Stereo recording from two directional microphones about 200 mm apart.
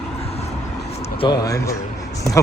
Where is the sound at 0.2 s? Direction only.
30° left (ahead or behind).